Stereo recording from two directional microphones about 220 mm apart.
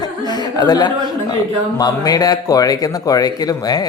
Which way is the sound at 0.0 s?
20° left (ahead or behind).